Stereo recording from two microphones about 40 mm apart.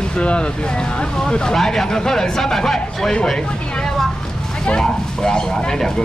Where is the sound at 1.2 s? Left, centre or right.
Centre.